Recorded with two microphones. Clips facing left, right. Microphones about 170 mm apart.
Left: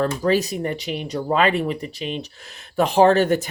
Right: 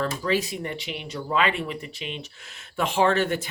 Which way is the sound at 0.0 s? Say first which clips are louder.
Left 6 dB; 40° left (ahead or behind).